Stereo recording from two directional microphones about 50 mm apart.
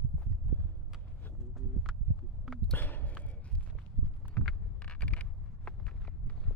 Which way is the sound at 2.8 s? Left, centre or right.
Left.